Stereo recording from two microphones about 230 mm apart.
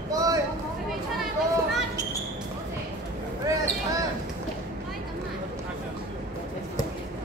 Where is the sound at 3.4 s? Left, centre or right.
Centre.